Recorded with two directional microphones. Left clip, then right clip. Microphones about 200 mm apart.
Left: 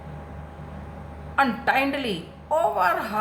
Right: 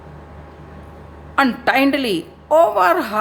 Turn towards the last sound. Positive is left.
turn(degrees=-45)  # may be behind; listen again after turning